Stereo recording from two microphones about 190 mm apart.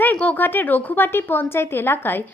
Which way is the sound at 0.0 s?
5° left (ahead or behind).